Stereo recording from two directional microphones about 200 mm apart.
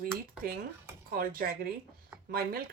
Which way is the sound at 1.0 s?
45° right (ahead or behind).